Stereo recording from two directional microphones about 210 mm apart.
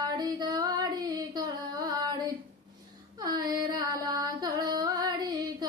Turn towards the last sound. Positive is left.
turn(degrees=-15)  # may be behind; listen again after turning